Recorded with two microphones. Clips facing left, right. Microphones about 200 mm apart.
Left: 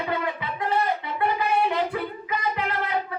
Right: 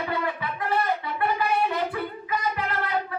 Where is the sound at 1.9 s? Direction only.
20° left (ahead or behind).